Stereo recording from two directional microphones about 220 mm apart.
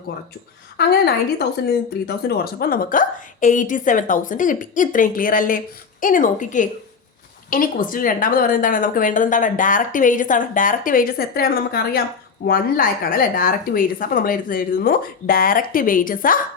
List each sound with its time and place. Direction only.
0.8 s a woman's voice: 45° left (ahead or behind)